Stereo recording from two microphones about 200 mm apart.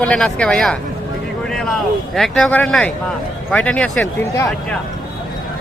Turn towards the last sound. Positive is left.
turn(degrees=5)  # may be behind; listen again after turning